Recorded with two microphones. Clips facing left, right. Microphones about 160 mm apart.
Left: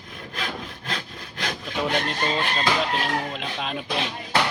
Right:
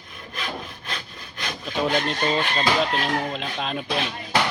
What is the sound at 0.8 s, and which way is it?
Sawing, 90° left.